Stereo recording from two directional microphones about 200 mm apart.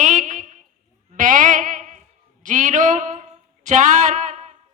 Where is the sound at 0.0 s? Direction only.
40° right (ahead or behind).